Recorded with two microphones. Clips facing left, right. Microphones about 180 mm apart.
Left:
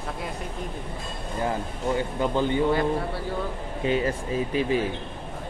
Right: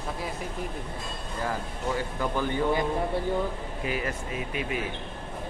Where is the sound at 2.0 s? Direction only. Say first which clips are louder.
Left 5 dB; 20° left (ahead or behind).